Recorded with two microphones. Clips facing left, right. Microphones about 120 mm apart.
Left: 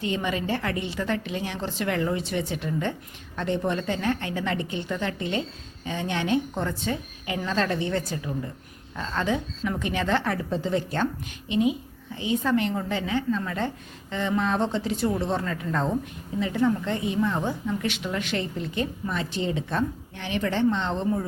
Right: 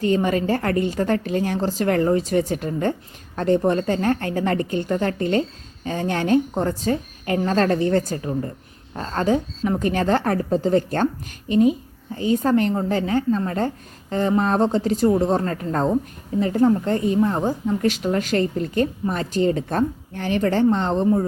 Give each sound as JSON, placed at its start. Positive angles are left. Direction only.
{"t": 0.0, "sound": "a woman's voice", "side_deg": -45}